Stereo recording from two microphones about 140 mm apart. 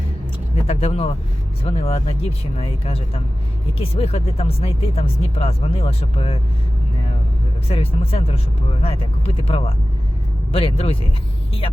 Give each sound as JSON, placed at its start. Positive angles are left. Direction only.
{"t": 0.7, "sound": "speech", "side_deg": 45}
{"t": 7.7, "sound": "speech", "side_deg": 45}